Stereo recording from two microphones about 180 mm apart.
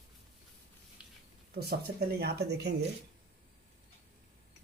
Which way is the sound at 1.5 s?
65° right (ahead or behind).